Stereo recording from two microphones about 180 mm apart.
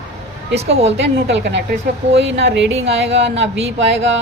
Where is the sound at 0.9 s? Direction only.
75° right (ahead or behind).